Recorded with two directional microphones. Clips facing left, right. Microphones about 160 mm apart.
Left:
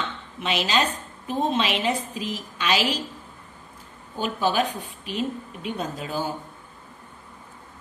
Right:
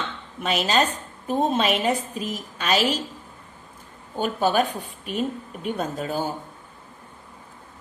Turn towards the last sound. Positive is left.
turn(degrees=-45)  # may be behind; listen again after turning